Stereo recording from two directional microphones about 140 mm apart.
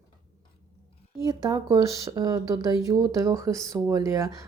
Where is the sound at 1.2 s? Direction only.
25° right (ahead or behind).